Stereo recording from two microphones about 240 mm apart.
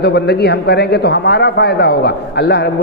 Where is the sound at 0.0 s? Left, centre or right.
Left.